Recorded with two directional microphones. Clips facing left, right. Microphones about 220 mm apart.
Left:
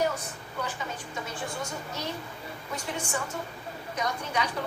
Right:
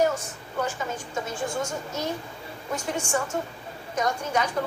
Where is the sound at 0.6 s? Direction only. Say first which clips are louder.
Right 6 dB; 45° right (ahead or behind).